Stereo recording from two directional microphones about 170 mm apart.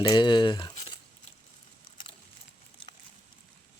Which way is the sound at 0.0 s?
25° left (ahead or behind).